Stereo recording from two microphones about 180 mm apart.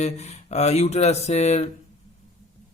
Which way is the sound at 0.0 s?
40° left (ahead or behind).